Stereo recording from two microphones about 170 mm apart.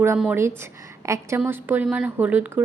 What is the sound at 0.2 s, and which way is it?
A woman's voice, 10° right (ahead or behind).